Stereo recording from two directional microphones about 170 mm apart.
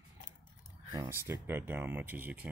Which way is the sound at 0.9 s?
15° right (ahead or behind).